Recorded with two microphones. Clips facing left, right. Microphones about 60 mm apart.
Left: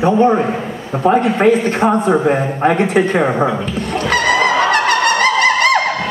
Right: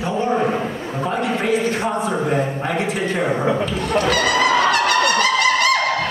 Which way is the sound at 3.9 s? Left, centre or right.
Left.